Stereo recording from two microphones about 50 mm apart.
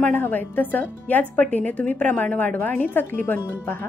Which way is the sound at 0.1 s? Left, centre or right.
Left.